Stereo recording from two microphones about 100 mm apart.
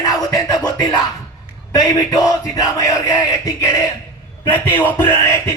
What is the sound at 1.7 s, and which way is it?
Speech, 35° left (ahead or behind).